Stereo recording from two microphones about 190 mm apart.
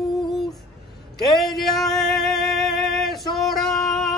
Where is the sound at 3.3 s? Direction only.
Centre (ahead or behind).